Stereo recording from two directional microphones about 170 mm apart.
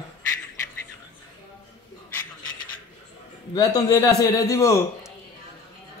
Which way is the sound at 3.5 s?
20° left (ahead or behind).